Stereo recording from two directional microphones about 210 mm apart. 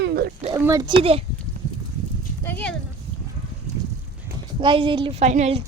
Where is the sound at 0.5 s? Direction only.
15° right (ahead or behind).